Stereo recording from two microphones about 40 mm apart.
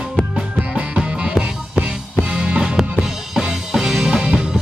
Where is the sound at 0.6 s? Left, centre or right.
Right.